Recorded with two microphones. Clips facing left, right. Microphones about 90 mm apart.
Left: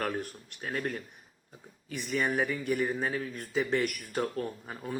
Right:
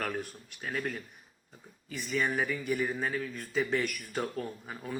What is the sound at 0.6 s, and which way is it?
Speech, 40° left (ahead or behind).